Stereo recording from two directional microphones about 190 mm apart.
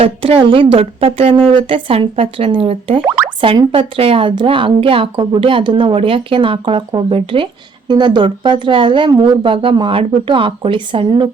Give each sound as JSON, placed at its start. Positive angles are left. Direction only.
{"t": 0.0, "sound": "a woman's voice", "side_deg": -30}
{"t": 3.0, "sound": "speech", "side_deg": -10}
{"t": 3.4, "sound": "a woman's voice", "side_deg": -30}